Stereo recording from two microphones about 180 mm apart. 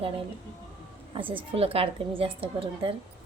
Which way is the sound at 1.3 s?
30° right (ahead or behind).